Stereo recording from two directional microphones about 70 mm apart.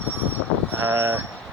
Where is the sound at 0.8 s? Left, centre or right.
Right.